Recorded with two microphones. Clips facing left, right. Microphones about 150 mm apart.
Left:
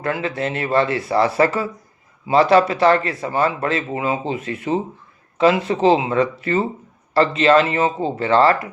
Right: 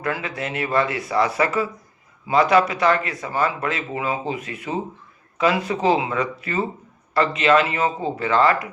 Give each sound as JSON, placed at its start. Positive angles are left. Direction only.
{"t": 0.0, "sound": "speech", "side_deg": 30}